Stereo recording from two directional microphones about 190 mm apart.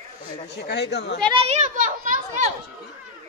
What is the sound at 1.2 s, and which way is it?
A child's voice, 30° right (ahead or behind).